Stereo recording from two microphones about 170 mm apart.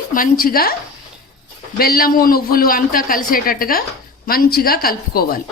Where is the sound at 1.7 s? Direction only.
60° left (ahead or behind).